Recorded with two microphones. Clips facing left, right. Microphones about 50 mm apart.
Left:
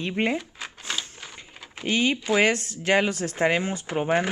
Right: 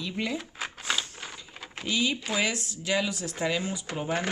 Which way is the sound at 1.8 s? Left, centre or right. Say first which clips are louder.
Left 5 dB; left.